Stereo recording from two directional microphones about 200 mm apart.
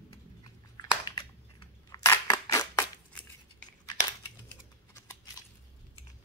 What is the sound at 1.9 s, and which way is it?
Scissors, 15° left (ahead or behind).